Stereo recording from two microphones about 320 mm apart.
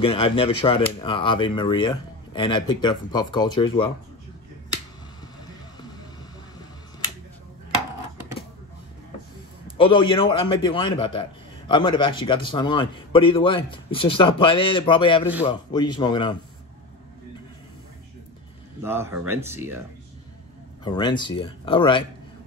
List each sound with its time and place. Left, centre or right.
0.0 s a man's voice: centre
9.8 s a man's voice: centre
18.8 s speech: centre
20.8 s a man's voice: centre